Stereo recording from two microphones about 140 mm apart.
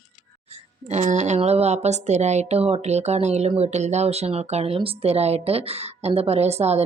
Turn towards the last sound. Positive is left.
turn(degrees=-50)  # may be behind; listen again after turning